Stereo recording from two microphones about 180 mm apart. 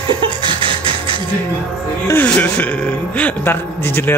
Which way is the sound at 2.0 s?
10° left (ahead or behind).